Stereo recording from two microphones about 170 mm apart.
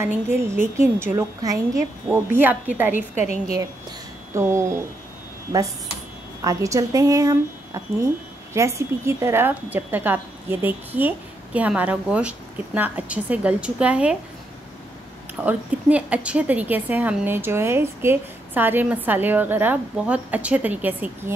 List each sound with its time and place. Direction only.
0.0 s a woman's voice: 15° right (ahead or behind)
4.3 s speech: 15° right (ahead or behind)
6.4 s a woman's voice: 20° right (ahead or behind)
15.4 s a woman's voice: 10° right (ahead or behind)